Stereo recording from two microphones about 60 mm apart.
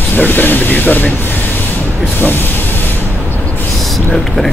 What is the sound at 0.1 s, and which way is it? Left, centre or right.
Speech, left.